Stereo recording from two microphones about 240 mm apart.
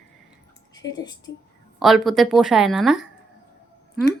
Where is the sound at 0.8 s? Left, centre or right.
Centre.